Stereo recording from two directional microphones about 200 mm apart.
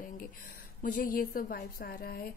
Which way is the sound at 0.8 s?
45° left (ahead or behind).